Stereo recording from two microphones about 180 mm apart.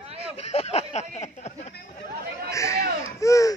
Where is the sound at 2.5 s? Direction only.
15° left (ahead or behind).